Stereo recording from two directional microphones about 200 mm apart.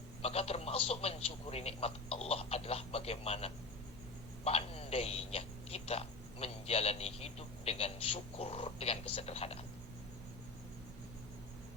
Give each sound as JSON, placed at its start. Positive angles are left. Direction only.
{"t": 0.2, "sound": "speech", "side_deg": 30}